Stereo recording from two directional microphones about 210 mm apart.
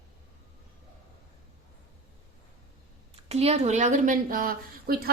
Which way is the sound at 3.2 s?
30° right (ahead or behind).